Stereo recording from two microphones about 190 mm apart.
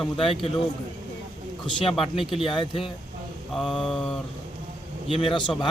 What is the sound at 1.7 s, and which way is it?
Speech, 30° left (ahead or behind).